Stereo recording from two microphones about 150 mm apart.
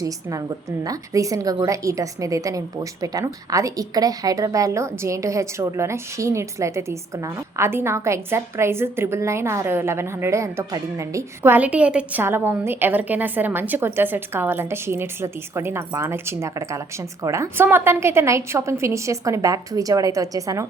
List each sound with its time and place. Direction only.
0.0 s a woman's voice: 20° right (ahead or behind)